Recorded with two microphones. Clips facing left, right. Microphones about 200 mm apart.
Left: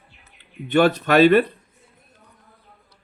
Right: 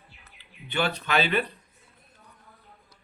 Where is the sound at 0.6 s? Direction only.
45° left (ahead or behind).